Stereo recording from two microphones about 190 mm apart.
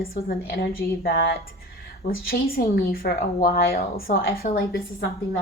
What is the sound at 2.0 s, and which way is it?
Speech, 50° left (ahead or behind).